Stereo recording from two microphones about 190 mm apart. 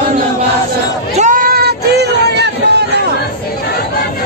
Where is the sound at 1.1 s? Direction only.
40° right (ahead or behind).